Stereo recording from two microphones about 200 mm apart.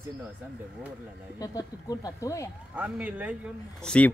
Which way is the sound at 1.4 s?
20° left (ahead or behind).